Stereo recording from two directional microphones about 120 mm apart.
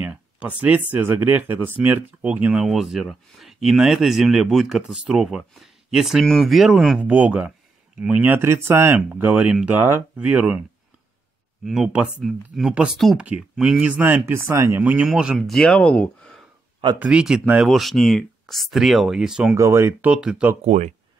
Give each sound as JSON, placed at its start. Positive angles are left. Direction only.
{"t": 0.0, "sound": "speech", "side_deg": -10}
{"t": 9.8, "sound": "speech", "side_deg": -20}
{"t": 10.1, "sound": "speech", "side_deg": -10}
{"t": 11.6, "sound": "speech", "side_deg": -5}
{"t": 15.3, "sound": "speech", "side_deg": 5}
{"t": 17.0, "sound": "speech", "side_deg": -10}
{"t": 19.5, "sound": "speech", "side_deg": -25}
{"t": 20.6, "sound": "speech", "side_deg": -70}